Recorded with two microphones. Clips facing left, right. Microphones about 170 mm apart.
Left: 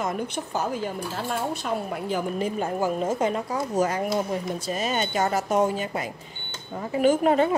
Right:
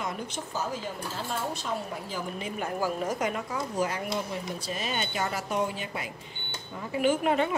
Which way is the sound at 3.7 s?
45° left (ahead or behind).